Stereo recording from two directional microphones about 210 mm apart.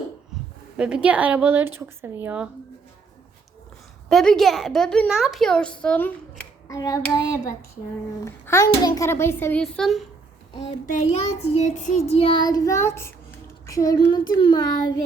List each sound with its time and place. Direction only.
0.8 s a woman's voice: 5° right (ahead or behind)
4.1 s a woman's voice: centre (ahead or behind)
10.9 s child singing: 30° left (ahead or behind)